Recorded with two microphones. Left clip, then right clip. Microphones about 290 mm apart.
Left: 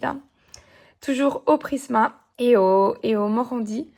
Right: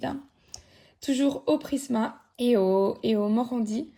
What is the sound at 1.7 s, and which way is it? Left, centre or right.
Speech, left.